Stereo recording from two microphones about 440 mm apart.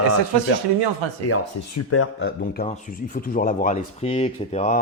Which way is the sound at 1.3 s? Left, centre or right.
Left.